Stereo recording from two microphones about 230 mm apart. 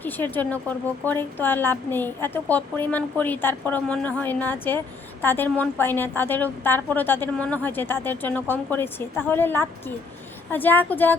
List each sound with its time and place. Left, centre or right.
0.0 s a woman's voice: centre